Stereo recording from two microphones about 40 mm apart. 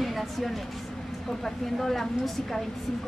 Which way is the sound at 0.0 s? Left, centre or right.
Centre.